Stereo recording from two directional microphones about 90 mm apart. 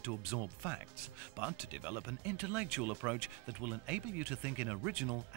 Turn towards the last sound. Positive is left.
turn(degrees=-15)  # may be behind; listen again after turning